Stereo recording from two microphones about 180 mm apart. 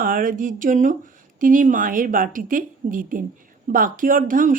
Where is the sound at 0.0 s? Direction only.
50° right (ahead or behind).